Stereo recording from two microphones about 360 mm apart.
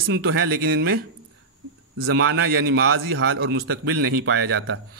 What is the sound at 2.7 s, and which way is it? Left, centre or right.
A man's voice, right.